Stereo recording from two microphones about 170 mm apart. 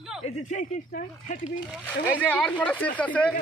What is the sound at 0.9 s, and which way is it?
Speech, 45° left (ahead or behind).